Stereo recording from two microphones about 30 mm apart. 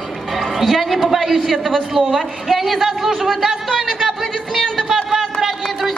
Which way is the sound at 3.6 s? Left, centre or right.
Centre.